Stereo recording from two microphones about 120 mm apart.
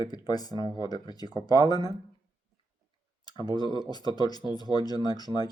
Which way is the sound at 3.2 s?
35° left (ahead or behind).